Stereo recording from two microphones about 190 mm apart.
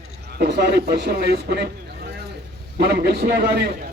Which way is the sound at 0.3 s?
60° right (ahead or behind).